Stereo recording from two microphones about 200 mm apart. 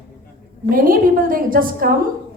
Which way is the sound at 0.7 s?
45° right (ahead or behind).